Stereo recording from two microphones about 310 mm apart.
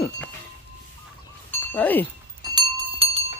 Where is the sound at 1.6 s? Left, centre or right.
Centre.